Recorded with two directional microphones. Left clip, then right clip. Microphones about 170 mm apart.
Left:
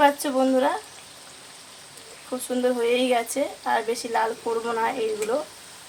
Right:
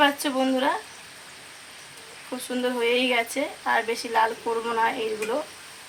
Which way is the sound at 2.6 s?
65° left (ahead or behind).